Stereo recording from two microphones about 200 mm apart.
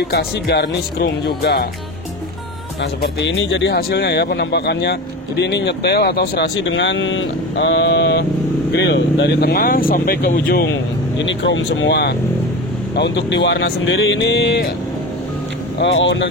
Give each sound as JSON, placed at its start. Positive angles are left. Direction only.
{"t": 0.1, "sound": "speech", "side_deg": 55}
{"t": 2.8, "sound": "speech", "side_deg": 60}
{"t": 11.1, "sound": "speech", "side_deg": 65}
{"t": 15.8, "sound": "speech", "side_deg": 65}